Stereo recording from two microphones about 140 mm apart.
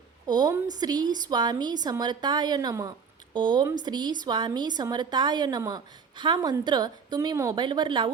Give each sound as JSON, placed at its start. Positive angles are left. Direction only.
{"t": 0.3, "sound": "a woman's voice", "side_deg": -30}